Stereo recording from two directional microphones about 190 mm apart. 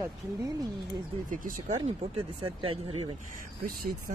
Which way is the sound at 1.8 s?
30° right (ahead or behind).